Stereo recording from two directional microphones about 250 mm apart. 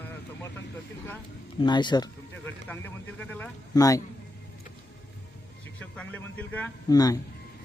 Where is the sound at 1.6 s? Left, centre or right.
Centre.